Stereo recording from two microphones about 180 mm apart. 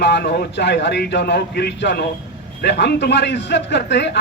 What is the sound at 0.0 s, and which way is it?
A man's voice, 70° left (ahead or behind).